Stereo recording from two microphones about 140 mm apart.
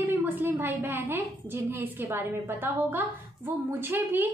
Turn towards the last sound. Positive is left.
turn(degrees=-15)  # may be behind; listen again after turning